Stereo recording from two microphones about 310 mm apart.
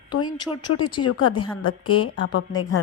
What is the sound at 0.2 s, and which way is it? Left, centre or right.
Speech, centre.